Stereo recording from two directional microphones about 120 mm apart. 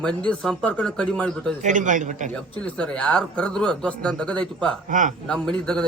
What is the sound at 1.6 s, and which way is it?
Speech, 90° right.